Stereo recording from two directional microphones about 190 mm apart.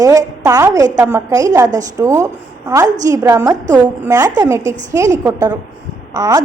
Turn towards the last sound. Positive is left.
turn(degrees=-20)  # may be behind; listen again after turning